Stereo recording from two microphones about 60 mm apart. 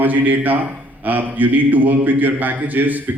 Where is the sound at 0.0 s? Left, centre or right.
Right.